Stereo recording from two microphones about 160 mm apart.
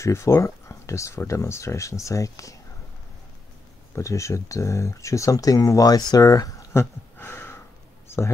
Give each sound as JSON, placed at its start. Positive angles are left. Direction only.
{"t": 0.0, "sound": "speech", "side_deg": 20}
{"t": 3.9, "sound": "speech", "side_deg": 20}